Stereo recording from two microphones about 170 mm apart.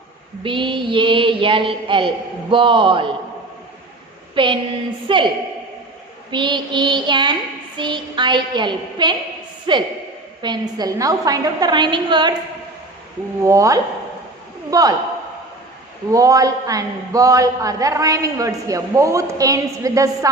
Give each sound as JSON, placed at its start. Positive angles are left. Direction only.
{"t": 0.4, "sound": "a man's voice", "side_deg": -30}
{"t": 4.4, "sound": "a sound", "side_deg": -30}
{"t": 6.3, "sound": "a man's voice", "side_deg": -25}
{"t": 13.4, "sound": "a man's voice", "side_deg": -20}
{"t": 16.0, "sound": "a man's voice", "side_deg": -20}